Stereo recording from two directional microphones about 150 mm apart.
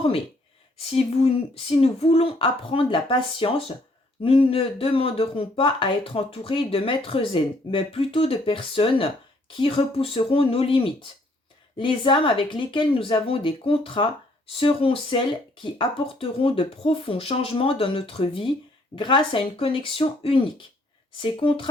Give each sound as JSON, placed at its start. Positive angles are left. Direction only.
{"t": 0.9, "sound": "speech", "side_deg": 40}